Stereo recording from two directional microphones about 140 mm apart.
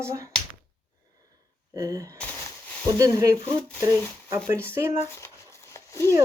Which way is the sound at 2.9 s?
25° right (ahead or behind).